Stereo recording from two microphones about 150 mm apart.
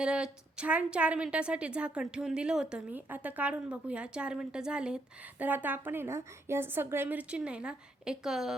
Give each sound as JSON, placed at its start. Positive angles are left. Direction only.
{"t": 0.0, "sound": "a woman's voice", "side_deg": -5}